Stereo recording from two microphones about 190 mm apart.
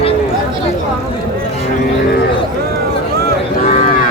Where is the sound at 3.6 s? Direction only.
35° left (ahead or behind).